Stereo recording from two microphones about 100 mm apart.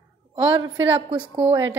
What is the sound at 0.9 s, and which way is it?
Speech, 65° right (ahead or behind).